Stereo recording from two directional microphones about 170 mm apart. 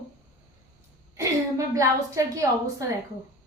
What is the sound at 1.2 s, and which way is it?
A woman's voice, 20° right (ahead or behind).